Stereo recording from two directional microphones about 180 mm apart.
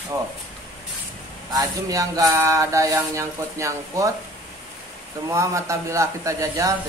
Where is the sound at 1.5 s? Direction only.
20° right (ahead or behind).